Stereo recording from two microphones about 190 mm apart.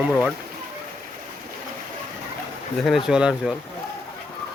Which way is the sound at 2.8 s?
Centre (ahead or behind).